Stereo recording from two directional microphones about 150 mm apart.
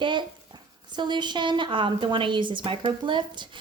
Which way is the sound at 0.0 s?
30° right (ahead or behind).